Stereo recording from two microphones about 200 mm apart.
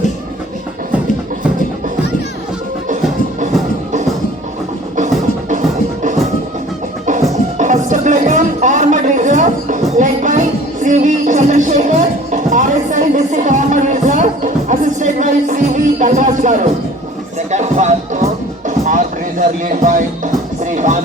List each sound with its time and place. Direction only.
7.6 s music: 40° right (ahead or behind)